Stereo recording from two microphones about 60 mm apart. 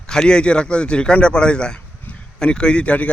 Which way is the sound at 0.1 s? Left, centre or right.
Centre.